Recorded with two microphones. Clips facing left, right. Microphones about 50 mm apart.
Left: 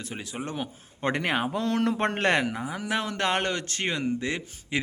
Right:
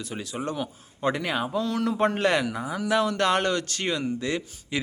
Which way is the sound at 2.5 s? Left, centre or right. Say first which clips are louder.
Right 4 dB; left.